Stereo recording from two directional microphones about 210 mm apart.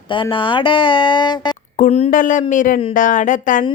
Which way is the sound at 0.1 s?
25° left (ahead or behind).